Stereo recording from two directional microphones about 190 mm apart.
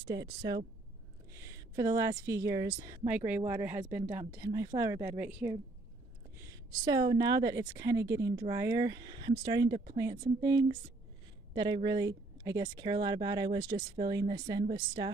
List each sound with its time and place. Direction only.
0.3 s speech: 25° right (ahead or behind)
1.3 s a sound: 20° right (ahead or behind)
2.8 s speech: 20° right (ahead or behind)